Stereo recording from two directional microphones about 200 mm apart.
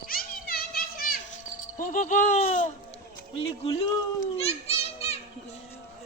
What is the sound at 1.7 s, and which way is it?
Speech, 40° left (ahead or behind).